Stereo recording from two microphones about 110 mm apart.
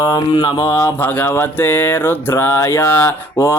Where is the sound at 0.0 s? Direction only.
40° left (ahead or behind).